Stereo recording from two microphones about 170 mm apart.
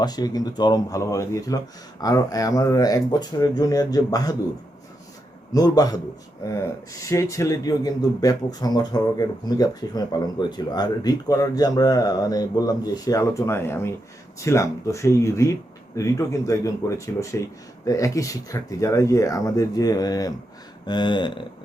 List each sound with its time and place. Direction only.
0.0 s speech: 25° left (ahead or behind)
5.5 s speech: 20° left (ahead or behind)
17.8 s speech: 20° left (ahead or behind)